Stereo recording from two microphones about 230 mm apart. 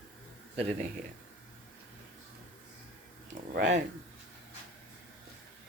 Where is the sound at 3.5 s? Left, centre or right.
Right.